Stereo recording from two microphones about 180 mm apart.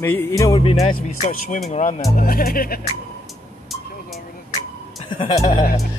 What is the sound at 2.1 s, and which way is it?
Speech, 55° left (ahead or behind).